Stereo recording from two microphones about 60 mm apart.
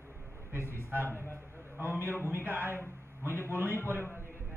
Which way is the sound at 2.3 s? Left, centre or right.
Right.